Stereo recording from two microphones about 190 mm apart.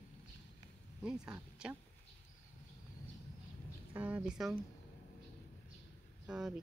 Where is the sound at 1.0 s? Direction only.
5° right (ahead or behind).